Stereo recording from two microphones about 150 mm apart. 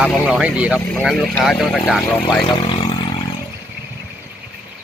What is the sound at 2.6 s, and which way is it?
Speech, 35° left (ahead or behind).